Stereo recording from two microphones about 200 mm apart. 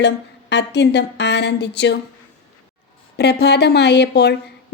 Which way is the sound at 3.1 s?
55° left (ahead or behind).